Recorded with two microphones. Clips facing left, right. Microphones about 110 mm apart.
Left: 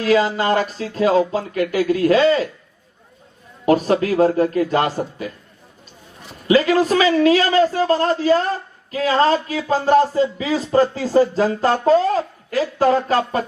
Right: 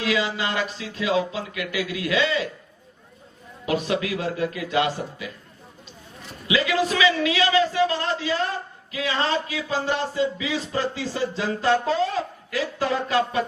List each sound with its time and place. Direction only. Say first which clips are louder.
0.0 s a man's voice: left 8 dB; 45° left (ahead or behind)
3.7 s a man's voice: left 8 dB; 45° left (ahead or behind)
6.5 s a man's voice: left 8 dB; 45° left (ahead or behind)